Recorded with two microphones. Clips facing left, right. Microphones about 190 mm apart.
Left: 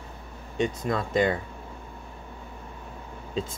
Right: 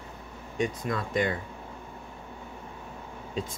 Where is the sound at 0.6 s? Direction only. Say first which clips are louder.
Left 3 dB; 30° left (ahead or behind).